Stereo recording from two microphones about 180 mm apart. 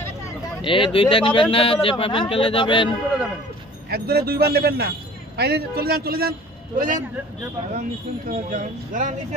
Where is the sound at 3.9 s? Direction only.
60° right (ahead or behind).